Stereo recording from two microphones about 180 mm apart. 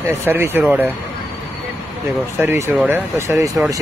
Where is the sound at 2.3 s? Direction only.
15° right (ahead or behind).